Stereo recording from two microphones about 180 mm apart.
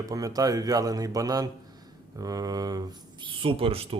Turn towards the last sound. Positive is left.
turn(degrees=-30)  # may be behind; listen again after turning